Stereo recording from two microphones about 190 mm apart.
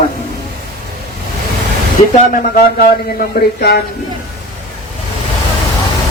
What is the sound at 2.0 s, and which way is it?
Speech, 35° left (ahead or behind).